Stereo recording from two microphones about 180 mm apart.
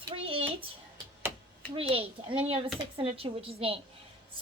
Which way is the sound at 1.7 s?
30° right (ahead or behind).